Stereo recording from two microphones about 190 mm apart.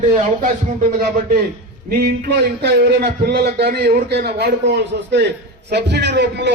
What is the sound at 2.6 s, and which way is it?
A man's voice, 60° right (ahead or behind).